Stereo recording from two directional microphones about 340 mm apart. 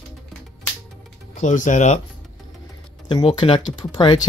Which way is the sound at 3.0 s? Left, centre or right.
Centre.